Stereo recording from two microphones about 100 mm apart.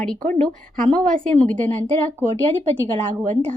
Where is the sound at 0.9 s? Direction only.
10° left (ahead or behind).